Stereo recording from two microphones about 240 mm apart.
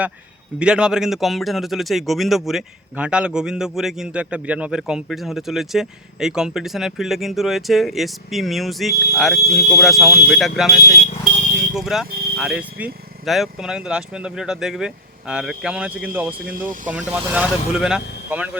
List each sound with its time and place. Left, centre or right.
0.6 s speech: centre
9.4 s speech: left
9.6 s speech: centre
10.8 s speech: left
11.7 s speech: centre